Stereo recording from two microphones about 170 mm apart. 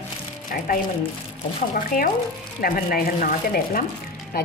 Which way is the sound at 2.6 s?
60° left (ahead or behind).